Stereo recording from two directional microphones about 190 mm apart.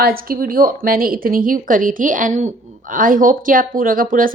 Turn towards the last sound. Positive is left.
turn(degrees=-45)  # may be behind; listen again after turning